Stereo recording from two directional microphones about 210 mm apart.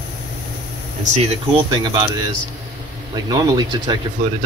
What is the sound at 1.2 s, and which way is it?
Speech, 30° right (ahead or behind).